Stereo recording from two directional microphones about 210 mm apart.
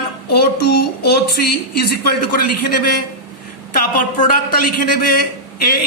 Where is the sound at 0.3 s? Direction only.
50° left (ahead or behind).